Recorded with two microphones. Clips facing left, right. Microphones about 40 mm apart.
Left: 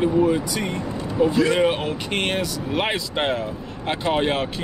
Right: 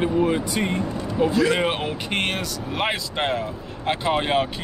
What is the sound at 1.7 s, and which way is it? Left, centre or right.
Speech, centre.